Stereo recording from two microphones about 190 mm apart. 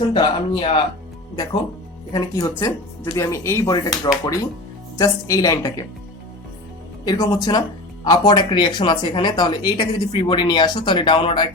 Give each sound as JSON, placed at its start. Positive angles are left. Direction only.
{"t": 0.1, "sound": "speech", "side_deg": 25}
{"t": 2.1, "sound": "speech", "side_deg": 20}
{"t": 7.0, "sound": "speech", "side_deg": 20}